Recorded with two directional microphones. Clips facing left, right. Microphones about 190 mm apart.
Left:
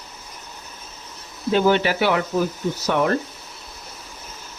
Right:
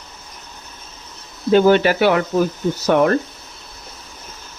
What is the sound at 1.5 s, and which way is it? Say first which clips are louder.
Speech: right 5 dB; 50° right (ahead or behind).